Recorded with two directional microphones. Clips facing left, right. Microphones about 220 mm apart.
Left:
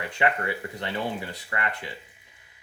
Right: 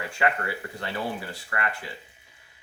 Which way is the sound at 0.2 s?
20° left (ahead or behind).